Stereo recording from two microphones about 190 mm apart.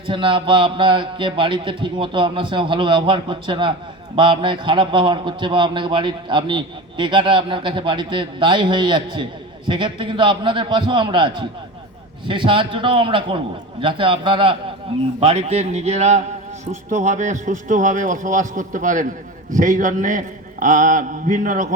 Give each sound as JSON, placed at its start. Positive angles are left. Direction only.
{"t": 0.1, "sound": "a man's voice", "side_deg": -25}